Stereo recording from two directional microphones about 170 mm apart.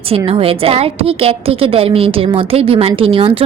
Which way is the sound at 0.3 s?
35° right (ahead or behind).